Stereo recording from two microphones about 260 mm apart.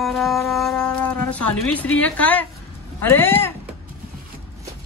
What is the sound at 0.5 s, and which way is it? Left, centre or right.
Shofar, centre.